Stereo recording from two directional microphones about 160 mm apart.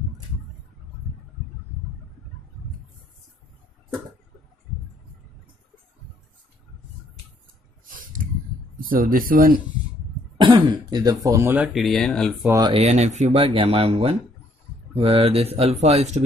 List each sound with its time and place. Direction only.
7.8 s a sound: 60° right (ahead or behind)
8.8 s speech: 60° right (ahead or behind)
10.3 s speech: 30° right (ahead or behind)
11.5 s speech: 5° right (ahead or behind)
12.4 s speech: 20° right (ahead or behind)
12.7 s speech: 45° right (ahead or behind)